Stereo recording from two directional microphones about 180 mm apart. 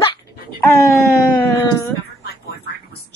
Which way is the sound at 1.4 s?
15° left (ahead or behind).